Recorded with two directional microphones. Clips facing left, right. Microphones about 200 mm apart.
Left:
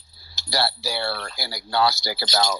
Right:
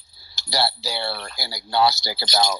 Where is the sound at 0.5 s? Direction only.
20° right (ahead or behind).